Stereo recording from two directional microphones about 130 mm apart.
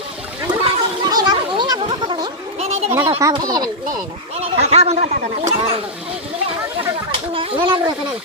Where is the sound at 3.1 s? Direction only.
30° right (ahead or behind).